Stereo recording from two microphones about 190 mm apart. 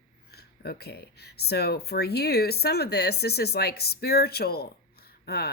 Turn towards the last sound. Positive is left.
turn(degrees=55)  # may be behind; listen again after turning